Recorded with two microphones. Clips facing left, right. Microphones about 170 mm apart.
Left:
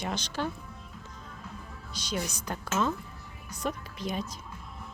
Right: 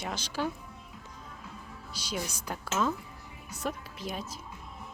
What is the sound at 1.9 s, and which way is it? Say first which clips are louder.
A woman's voice: left 2 dB; 10° right (ahead or behind).